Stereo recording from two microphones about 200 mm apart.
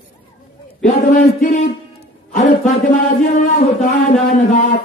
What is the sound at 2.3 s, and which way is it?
Speech, 40° left (ahead or behind).